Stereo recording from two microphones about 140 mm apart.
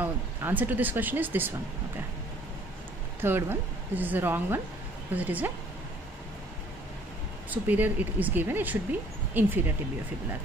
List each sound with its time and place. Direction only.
0.0 s speech: 15° right (ahead or behind)
3.2 s a woman's voice: 15° right (ahead or behind)
7.5 s a woman's voice: 10° right (ahead or behind)